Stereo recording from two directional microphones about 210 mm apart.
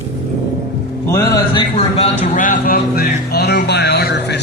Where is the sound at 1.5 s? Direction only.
30° left (ahead or behind).